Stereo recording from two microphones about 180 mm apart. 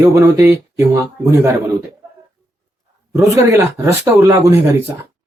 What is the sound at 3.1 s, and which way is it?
Speech, 15° right (ahead or behind).